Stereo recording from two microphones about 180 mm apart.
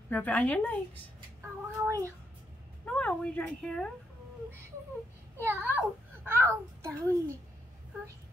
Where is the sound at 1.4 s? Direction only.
15° right (ahead or behind).